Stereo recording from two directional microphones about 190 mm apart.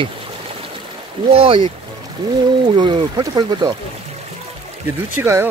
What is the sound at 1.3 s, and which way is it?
Speech, 30° right (ahead or behind).